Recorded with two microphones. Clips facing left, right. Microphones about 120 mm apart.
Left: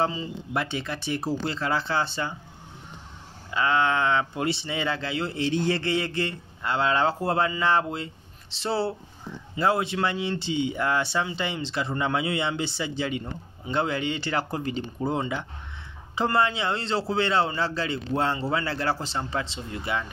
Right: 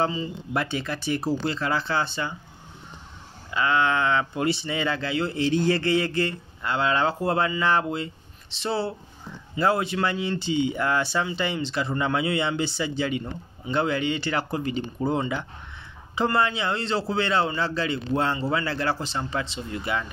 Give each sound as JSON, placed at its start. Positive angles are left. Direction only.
{"t": 0.6, "sound": "speech", "side_deg": 20}
{"t": 3.5, "sound": "speech", "side_deg": 30}
{"t": 9.6, "sound": "speech", "side_deg": 20}
{"t": 15.0, "sound": "speech", "side_deg": 15}